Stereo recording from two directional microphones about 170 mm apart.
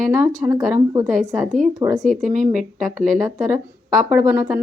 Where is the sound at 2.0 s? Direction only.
50° right (ahead or behind).